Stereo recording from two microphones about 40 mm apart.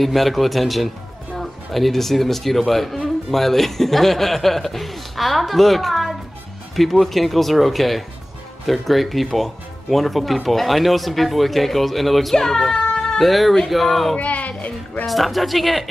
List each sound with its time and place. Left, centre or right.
0.0 s speech: centre
12.4 s cat: centre
13.2 s speech: centre
14.1 s a child's voice: left
15.0 s speech: centre